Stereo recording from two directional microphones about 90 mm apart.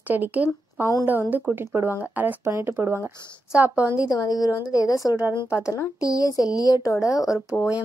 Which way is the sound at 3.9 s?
45° left (ahead or behind).